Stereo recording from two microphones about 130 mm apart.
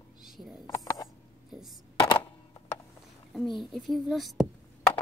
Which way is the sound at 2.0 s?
40° left (ahead or behind).